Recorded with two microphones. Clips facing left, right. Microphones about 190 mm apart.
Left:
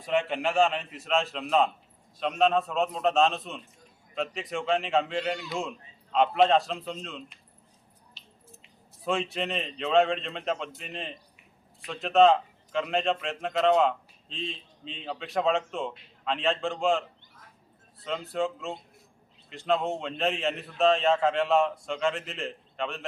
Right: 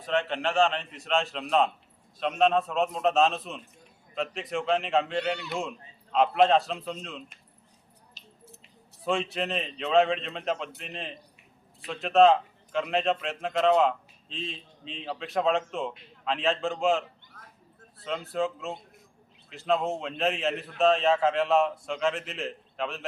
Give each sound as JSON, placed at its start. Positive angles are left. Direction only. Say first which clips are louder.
{"t": 0.0, "sound": "a man's voice", "louder": "left 1 dB", "side_deg": 10}
{"t": 8.2, "sound": "a sound", "louder": "right 5 dB", "side_deg": -40}
{"t": 9.0, "sound": "speech", "louder": "right 1 dB", "side_deg": 0}
{"t": 18.0, "sound": "speech", "louder": "even", "side_deg": 0}